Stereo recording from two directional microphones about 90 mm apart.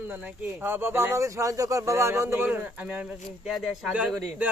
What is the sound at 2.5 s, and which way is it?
Speech, 15° right (ahead or behind).